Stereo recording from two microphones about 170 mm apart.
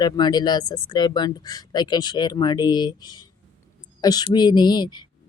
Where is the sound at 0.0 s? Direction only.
25° left (ahead or behind).